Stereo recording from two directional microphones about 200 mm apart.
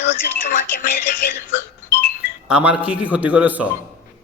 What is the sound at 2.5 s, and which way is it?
A man's voice, 5° right (ahead or behind).